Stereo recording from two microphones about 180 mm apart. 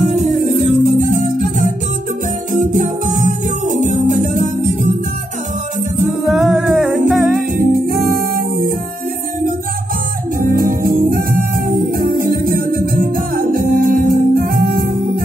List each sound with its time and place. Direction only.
0.2 s music: 45° right (ahead or behind)
6.2 s music: centre (ahead or behind)
7.5 s music: 55° right (ahead or behind)
10.4 s music: 55° right (ahead or behind)